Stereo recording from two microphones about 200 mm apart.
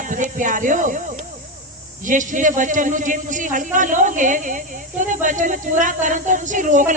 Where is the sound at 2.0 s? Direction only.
40° right (ahead or behind).